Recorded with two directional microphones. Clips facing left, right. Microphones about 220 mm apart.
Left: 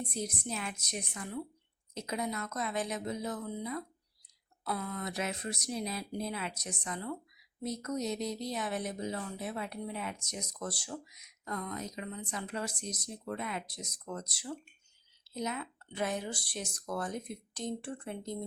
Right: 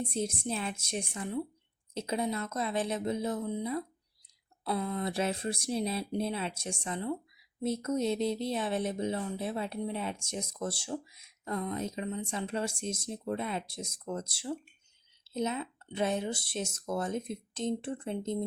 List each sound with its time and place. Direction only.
0.0 s speech: 25° right (ahead or behind)